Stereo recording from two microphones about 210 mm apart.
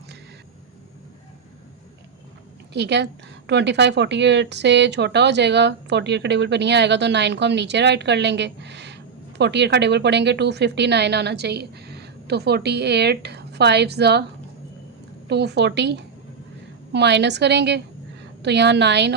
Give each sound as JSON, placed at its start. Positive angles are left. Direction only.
{"t": 2.7, "sound": "a woman's voice", "side_deg": -55}
{"t": 15.3, "sound": "a woman's voice", "side_deg": -55}